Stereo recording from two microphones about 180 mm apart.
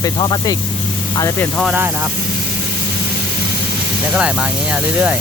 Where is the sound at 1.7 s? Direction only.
10° right (ahead or behind).